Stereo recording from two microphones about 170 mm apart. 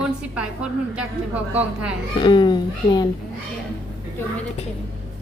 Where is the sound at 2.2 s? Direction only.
25° left (ahead or behind).